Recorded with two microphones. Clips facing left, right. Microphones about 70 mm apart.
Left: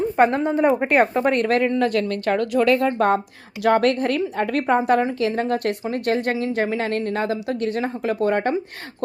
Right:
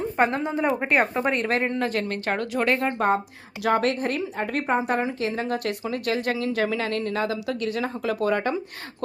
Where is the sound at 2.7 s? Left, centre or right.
Left.